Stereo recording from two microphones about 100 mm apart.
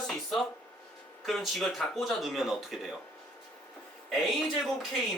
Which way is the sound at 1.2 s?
Centre (ahead or behind).